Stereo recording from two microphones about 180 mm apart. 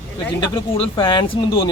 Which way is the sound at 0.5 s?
30° left (ahead or behind).